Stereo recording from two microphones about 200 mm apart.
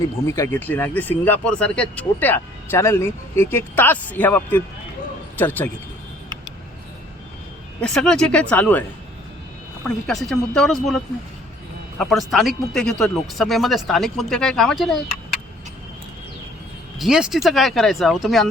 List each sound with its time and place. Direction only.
0.3 s speech: 10° left (ahead or behind)
7.8 s speech: 5° left (ahead or behind)
9.8 s speech: centre (ahead or behind)
11.9 s speech: centre (ahead or behind)
17.0 s speech: centre (ahead or behind)